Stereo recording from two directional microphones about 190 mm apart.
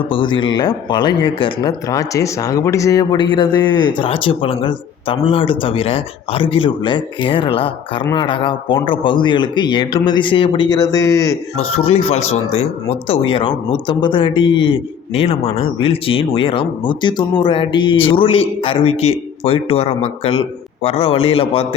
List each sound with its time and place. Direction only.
0.1 s speech: 25° left (ahead or behind)
11.5 s speech: 30° left (ahead or behind)